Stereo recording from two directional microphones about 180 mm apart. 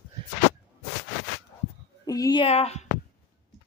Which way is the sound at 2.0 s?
20° left (ahead or behind).